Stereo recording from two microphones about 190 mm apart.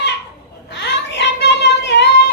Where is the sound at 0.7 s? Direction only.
65° left (ahead or behind).